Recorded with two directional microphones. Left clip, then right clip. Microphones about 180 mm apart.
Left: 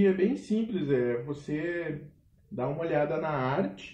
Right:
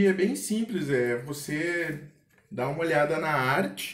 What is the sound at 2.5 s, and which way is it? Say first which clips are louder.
Speech: right 3 dB; 40° right (ahead or behind).